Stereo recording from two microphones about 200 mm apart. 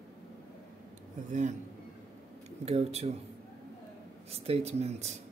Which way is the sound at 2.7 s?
30° right (ahead or behind).